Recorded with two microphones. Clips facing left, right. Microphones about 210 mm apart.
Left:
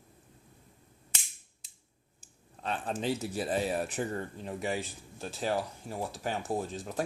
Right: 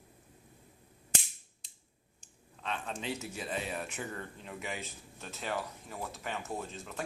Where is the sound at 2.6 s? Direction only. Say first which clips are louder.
Left 4 dB; 35° left (ahead or behind).